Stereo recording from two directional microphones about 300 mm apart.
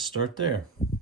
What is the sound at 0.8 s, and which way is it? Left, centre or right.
Speech, centre.